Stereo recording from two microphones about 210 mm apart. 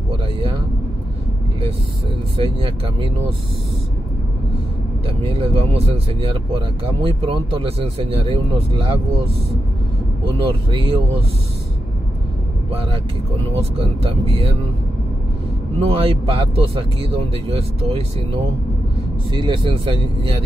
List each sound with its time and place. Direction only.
2.3 s speech: 25° right (ahead or behind)
5.2 s speech: 25° right (ahead or behind)
7.0 s speech: 25° right (ahead or behind)
10.4 s speech: 25° right (ahead or behind)
13.6 s speech: 25° right (ahead or behind)
15.8 s speech: 25° right (ahead or behind)
19.3 s speech: 20° right (ahead or behind)